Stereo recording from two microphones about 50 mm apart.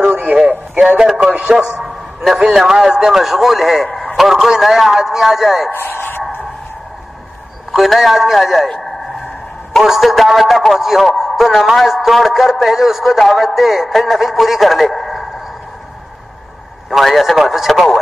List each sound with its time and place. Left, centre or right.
0.0 s radio: right
0.7 s a man's voice: centre
5.7 s a sound: left
7.7 s a man's voice: centre
9.8 s a man's voice: centre
16.9 s a man's voice: centre